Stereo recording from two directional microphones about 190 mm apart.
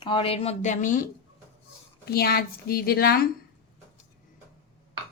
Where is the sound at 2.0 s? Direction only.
55° left (ahead or behind).